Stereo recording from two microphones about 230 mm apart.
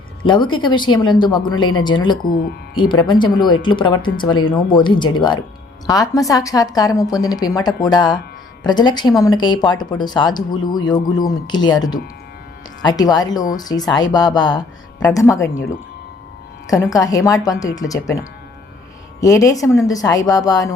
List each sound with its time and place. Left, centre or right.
0.3 s a woman's voice: left
16.6 s a woman's voice: centre